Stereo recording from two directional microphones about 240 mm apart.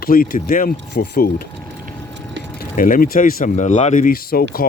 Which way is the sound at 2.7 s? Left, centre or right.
Left.